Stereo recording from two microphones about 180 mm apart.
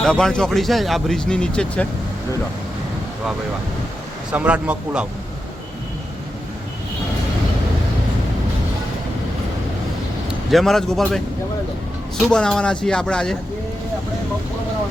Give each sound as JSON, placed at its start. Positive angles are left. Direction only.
{"t": 0.0, "sound": "speech", "side_deg": 0}
{"t": 4.3, "sound": "speech", "side_deg": -5}
{"t": 10.5, "sound": "speech", "side_deg": 0}